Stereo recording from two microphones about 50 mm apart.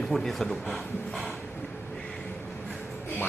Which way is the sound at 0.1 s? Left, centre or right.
Centre.